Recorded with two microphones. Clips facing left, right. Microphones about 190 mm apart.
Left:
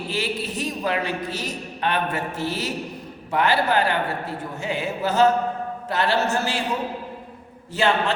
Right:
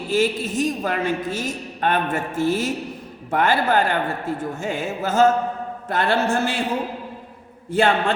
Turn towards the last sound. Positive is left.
turn(degrees=-55)  # may be behind; listen again after turning